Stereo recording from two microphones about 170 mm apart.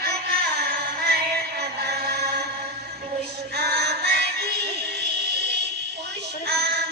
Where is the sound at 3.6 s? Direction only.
70° right (ahead or behind).